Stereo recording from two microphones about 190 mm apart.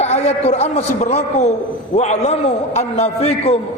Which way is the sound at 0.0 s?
35° left (ahead or behind).